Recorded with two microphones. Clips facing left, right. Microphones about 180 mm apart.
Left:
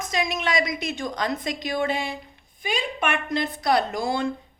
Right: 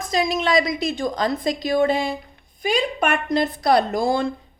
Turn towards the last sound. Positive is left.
turn(degrees=-35)  # may be behind; listen again after turning